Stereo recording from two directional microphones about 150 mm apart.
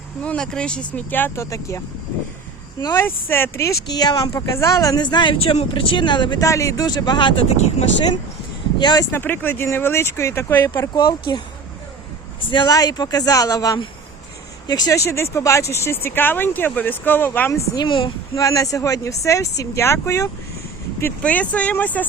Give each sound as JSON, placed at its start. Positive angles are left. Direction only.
{"t": 0.2, "sound": "speech", "side_deg": 5}
{"t": 2.8, "sound": "speech", "side_deg": 15}
{"t": 3.8, "sound": "speech", "side_deg": 25}
{"t": 7.5, "sound": "speech", "side_deg": 45}
{"t": 8.8, "sound": "speech", "side_deg": 30}
{"t": 9.1, "sound": "speech", "side_deg": 15}
{"t": 10.9, "sound": "speech", "side_deg": 30}
{"t": 12.5, "sound": "speech", "side_deg": 30}
{"t": 17.7, "sound": "a woman's voice", "side_deg": 35}
{"t": 18.4, "sound": "speech", "side_deg": 20}
{"t": 21.0, "sound": "speech", "side_deg": 10}